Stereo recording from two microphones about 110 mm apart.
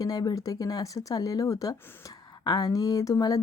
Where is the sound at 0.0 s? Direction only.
40° left (ahead or behind).